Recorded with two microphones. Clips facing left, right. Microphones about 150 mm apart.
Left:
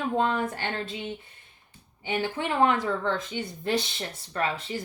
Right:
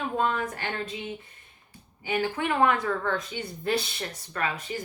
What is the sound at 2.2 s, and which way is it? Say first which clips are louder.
Speech: even; 25° left (ahead or behind).